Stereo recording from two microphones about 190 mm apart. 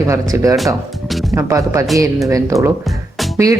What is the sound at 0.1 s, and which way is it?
Speech, 15° right (ahead or behind).